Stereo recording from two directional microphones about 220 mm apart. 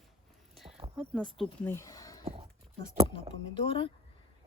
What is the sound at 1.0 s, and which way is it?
Speech, centre (ahead or behind).